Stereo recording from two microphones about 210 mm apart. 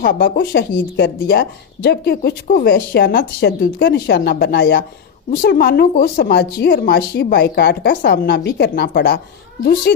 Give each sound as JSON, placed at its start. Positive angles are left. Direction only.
{"t": 0.0, "sound": "a woman's voice", "side_deg": 45}